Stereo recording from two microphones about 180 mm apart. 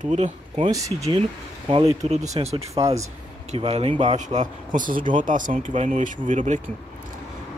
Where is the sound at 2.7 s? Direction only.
15° right (ahead or behind).